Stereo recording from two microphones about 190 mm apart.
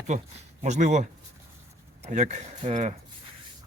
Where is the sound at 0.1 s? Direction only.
40° right (ahead or behind).